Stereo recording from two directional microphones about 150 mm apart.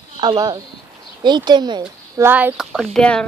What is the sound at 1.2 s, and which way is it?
Speech, 30° right (ahead or behind).